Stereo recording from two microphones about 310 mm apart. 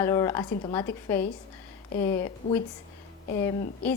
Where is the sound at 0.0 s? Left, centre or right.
Centre.